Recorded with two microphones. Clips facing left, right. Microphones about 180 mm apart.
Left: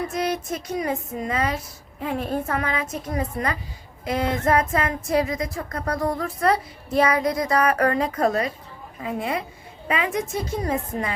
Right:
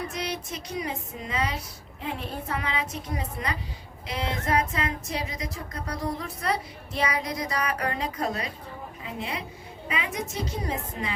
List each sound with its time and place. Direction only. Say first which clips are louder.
0.1 s speech: left 7 dB; 50° left (ahead or behind)